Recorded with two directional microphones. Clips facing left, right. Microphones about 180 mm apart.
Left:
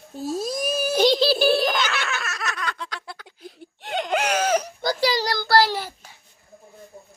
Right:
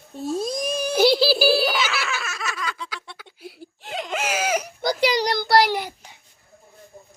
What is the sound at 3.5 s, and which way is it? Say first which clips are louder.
Baby cry: left 3 dB; centre (ahead or behind).